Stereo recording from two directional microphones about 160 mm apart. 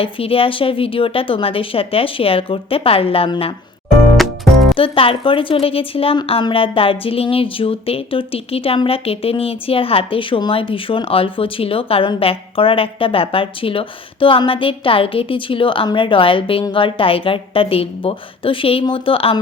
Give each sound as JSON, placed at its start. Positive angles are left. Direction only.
{"t": 0.0, "sound": "speech", "side_deg": 35}
{"t": 4.2, "sound": "music", "side_deg": 0}
{"t": 4.7, "sound": "speech", "side_deg": 35}